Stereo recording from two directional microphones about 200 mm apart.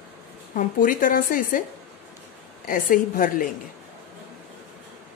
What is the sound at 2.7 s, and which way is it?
Speech, 45° left (ahead or behind).